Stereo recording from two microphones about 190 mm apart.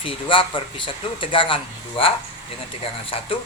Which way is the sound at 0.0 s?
25° left (ahead or behind).